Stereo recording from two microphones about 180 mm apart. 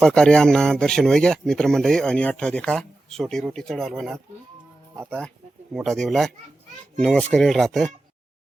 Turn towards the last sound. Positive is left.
turn(degrees=0)  # may be behind; listen again after turning